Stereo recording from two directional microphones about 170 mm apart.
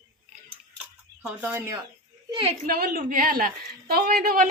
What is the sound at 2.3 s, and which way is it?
Speech, 30° right (ahead or behind).